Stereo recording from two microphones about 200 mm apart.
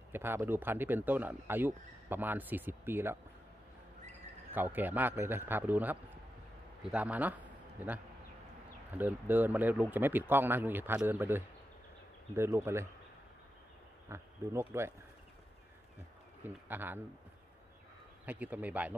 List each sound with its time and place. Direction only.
0.1 s speech: 10° right (ahead or behind)
4.6 s a man's voice: 10° right (ahead or behind)
14.0 s speech: 15° right (ahead or behind)
16.4 s speech: 10° right (ahead or behind)
18.2 s speech: 10° right (ahead or behind)